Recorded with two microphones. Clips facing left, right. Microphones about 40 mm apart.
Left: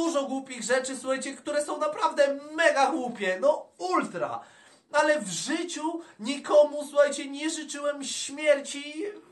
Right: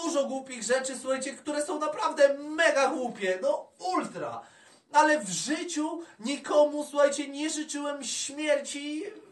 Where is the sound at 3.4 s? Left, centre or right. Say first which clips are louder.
Left 4 dB; left.